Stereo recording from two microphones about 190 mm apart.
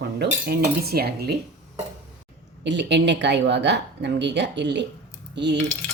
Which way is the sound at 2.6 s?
65° right (ahead or behind).